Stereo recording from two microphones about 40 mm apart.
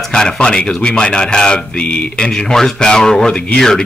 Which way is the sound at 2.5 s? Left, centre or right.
Centre.